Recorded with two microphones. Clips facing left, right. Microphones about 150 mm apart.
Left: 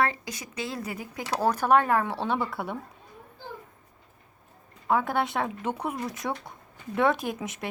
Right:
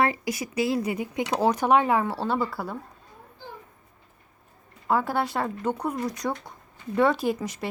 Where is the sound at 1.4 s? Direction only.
15° right (ahead or behind).